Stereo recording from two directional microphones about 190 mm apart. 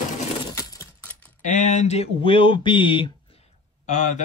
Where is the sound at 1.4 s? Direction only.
40° left (ahead or behind).